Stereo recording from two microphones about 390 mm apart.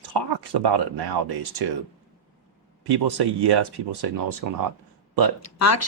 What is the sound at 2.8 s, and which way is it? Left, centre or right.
Speech, right.